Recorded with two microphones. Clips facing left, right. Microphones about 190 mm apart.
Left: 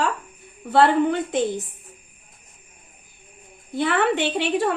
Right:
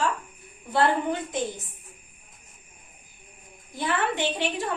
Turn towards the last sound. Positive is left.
turn(degrees=65)  # may be behind; listen again after turning